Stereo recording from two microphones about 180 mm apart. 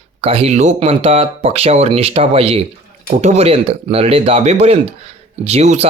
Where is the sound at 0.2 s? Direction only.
35° right (ahead or behind).